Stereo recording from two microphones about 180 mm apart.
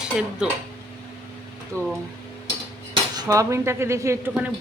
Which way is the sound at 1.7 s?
15° right (ahead or behind).